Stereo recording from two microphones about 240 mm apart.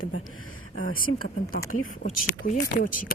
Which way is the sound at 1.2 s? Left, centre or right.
Left.